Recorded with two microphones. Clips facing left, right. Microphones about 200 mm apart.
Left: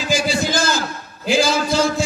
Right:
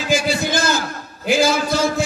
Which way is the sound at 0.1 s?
55° right (ahead or behind).